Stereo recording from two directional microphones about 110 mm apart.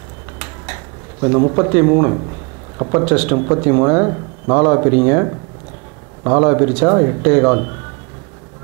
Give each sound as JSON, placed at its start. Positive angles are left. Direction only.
{"t": 1.2, "sound": "speech", "side_deg": -25}
{"t": 3.1, "sound": "speech", "side_deg": -10}
{"t": 3.3, "sound": "speech", "side_deg": -25}